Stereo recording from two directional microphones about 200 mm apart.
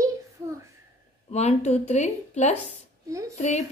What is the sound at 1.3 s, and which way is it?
Speech, 35° left (ahead or behind).